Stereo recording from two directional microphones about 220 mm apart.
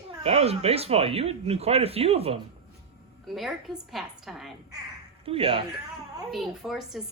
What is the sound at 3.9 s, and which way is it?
Speech, centre (ahead or behind).